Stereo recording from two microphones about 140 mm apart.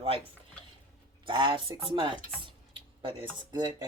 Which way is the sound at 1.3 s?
35° right (ahead or behind).